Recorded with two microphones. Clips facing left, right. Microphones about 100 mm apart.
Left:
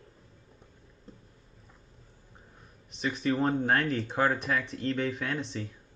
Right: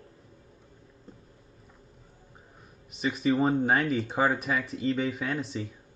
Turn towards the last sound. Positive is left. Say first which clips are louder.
# right 2 dB
turn(degrees=-5)  # may be behind; listen again after turning